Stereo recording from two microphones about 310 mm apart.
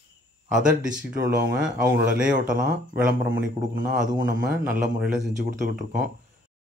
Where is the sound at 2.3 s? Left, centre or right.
Right.